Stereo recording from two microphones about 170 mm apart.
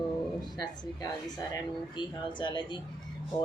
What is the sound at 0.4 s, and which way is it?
Speech, 25° left (ahead or behind).